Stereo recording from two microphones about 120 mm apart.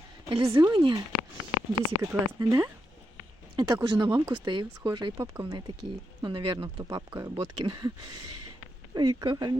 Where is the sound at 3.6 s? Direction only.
40° right (ahead or behind).